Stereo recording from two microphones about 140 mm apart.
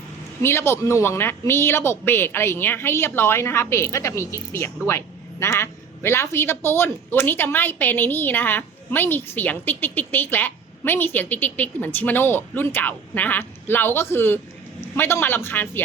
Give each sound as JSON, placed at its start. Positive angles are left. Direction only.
{"t": 0.4, "sound": "speech", "side_deg": 20}